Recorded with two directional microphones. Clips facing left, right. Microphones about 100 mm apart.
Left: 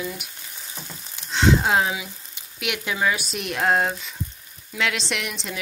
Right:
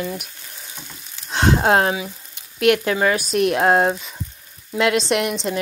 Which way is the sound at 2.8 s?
45° right (ahead or behind).